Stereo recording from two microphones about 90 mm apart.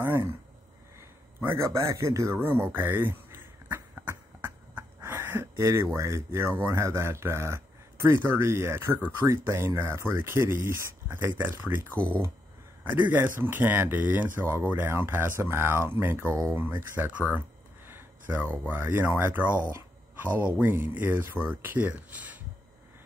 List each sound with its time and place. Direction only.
0.0 s a sound: 30° right (ahead or behind)
1.4 s a man's voice: 30° right (ahead or behind)
2.3 s a sound: 20° right (ahead or behind)
5.6 s a man's voice: 35° right (ahead or behind)
11.9 s speech: 15° left (ahead or behind)
13.1 s speech: 25° right (ahead or behind)
17.3 s a sound: 20° right (ahead or behind)
18.7 s speech: 25° right (ahead or behind)
20.5 s speech: 25° right (ahead or behind)